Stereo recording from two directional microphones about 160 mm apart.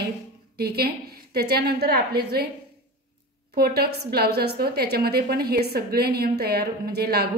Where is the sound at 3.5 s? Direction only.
80° right.